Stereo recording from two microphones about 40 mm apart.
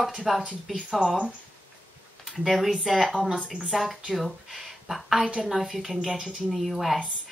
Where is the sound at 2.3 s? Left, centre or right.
Centre.